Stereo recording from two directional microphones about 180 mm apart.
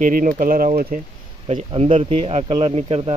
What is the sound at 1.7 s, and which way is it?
Speech, 30° right (ahead or behind).